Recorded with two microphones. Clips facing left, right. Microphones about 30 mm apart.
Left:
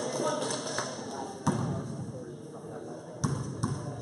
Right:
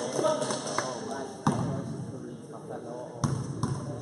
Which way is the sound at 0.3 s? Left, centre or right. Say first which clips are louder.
Right 3 dB; centre.